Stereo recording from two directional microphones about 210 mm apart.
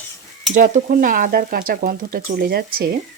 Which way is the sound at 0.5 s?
40° right (ahead or behind).